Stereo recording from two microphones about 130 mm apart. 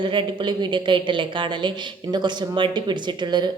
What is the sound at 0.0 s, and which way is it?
Speech, 40° right (ahead or behind).